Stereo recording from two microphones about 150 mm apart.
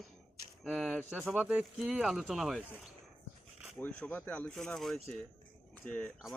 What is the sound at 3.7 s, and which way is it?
Speech, 5° left (ahead or behind).